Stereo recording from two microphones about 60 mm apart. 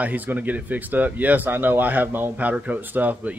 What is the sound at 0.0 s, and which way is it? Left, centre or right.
Speech, right.